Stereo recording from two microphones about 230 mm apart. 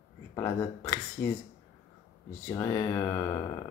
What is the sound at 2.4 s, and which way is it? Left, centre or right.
Speech, left.